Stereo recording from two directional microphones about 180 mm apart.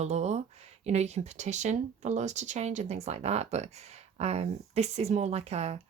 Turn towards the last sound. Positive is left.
turn(degrees=-35)  # may be behind; listen again after turning